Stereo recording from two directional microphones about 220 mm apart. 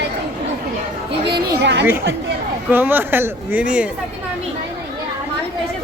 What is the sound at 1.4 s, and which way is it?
Speech, 55° right (ahead or behind).